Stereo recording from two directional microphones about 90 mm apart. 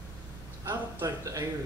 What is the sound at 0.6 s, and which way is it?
Speech, 35° right (ahead or behind).